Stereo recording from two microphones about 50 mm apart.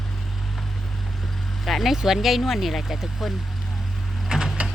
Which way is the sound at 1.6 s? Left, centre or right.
Centre.